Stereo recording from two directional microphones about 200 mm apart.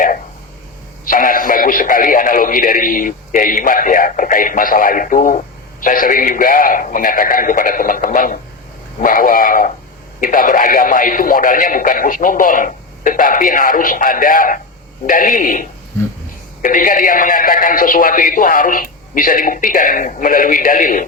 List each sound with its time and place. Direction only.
1.0 s speech: 45° left (ahead or behind)
16.6 s speech: 45° left (ahead or behind)